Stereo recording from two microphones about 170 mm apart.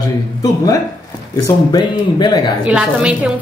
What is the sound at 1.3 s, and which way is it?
Speech, 25° left (ahead or behind).